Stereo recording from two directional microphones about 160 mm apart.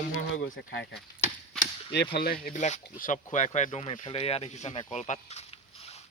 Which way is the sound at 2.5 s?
50° left (ahead or behind).